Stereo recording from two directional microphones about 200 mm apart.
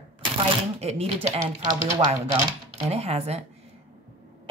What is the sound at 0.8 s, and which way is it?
Speech, 30° right (ahead or behind).